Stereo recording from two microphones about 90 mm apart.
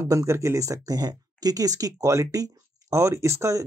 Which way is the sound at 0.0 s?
35° right (ahead or behind).